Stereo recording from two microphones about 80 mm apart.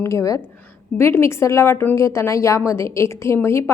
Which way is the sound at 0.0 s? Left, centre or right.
Left.